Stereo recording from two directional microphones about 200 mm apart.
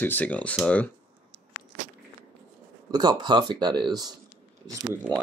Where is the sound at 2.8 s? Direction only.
20° right (ahead or behind).